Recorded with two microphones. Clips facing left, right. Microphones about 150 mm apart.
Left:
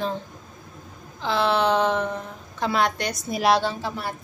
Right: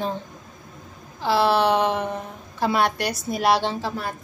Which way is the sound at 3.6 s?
25° right (ahead or behind).